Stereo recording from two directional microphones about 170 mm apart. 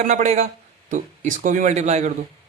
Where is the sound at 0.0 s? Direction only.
45° right (ahead or behind).